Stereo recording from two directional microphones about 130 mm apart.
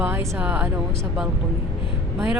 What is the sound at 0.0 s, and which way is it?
Speech, 15° right (ahead or behind).